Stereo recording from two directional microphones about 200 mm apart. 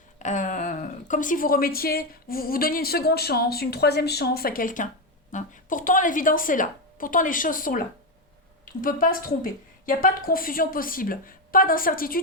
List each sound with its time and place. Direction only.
0.2 s a woman's voice: 40° left (ahead or behind)